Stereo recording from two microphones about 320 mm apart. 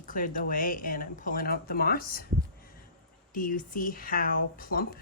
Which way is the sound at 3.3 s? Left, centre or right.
Left.